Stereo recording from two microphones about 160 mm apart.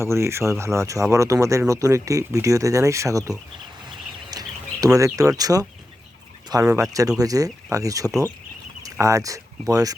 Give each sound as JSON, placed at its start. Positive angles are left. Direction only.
{"t": 0.0, "sound": "speech", "side_deg": -15}
{"t": 4.3, "sound": "a sound", "side_deg": -25}
{"t": 4.9, "sound": "speech", "side_deg": -20}